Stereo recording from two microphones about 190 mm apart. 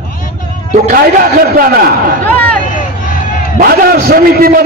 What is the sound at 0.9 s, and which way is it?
Speech, 50° right (ahead or behind).